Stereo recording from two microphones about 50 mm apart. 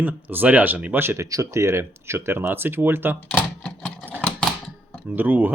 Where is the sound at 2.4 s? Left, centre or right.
Right.